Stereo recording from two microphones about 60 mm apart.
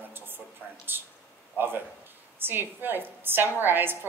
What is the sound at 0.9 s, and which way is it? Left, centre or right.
Speech, right.